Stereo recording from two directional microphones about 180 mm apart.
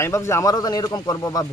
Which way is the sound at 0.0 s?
15° left (ahead or behind).